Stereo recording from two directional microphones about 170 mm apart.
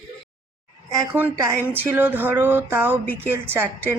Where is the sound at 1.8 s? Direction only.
10° right (ahead or behind).